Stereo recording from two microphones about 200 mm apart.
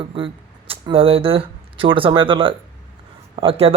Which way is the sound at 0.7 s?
30° right (ahead or behind).